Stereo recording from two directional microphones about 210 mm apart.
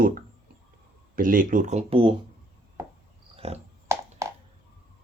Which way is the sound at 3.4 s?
30° right (ahead or behind).